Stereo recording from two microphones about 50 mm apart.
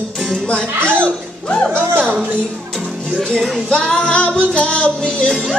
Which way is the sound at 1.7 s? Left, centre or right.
Right.